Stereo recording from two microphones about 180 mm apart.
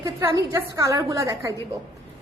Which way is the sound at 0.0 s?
15° right (ahead or behind).